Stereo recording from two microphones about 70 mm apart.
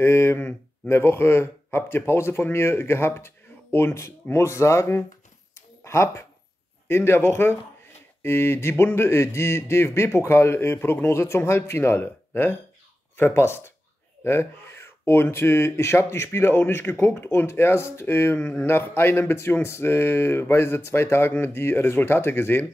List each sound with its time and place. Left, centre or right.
0.0 s speech: left